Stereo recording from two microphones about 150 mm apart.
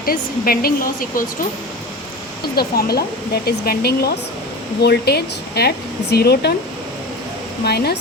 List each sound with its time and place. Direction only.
0.0 s speech: 80° left
2.6 s speech: 90° left
7.6 s speech: 90° left